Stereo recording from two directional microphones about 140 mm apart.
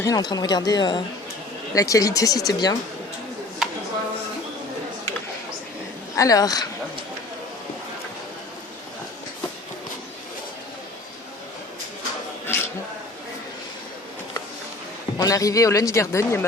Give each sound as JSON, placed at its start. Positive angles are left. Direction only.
{"t": 0.0, "sound": "a man's voice", "side_deg": 30}
{"t": 6.1, "sound": "a man's voice", "side_deg": 25}
{"t": 12.5, "sound": "a sound", "side_deg": 20}
{"t": 15.2, "sound": "a man's voice", "side_deg": 25}